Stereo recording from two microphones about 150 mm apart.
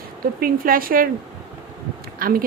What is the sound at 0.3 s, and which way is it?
Speech, 75° right (ahead or behind).